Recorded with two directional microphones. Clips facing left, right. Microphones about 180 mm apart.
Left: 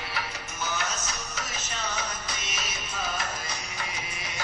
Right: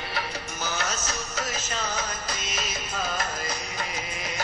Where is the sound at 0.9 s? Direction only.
45° right (ahead or behind).